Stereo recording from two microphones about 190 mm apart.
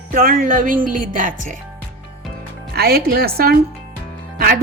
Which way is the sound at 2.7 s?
55° right (ahead or behind).